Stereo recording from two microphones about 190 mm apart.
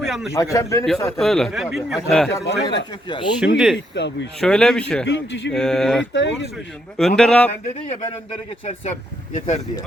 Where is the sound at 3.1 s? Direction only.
25° left (ahead or behind).